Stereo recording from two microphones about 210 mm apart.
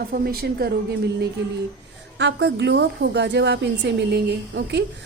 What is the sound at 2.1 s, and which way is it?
A woman's voice, 55° right (ahead or behind).